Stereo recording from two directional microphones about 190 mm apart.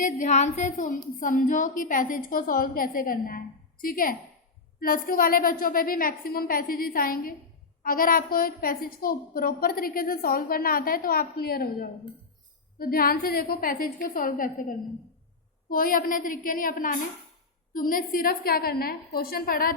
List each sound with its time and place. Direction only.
0.0 s speech: 40° left (ahead or behind)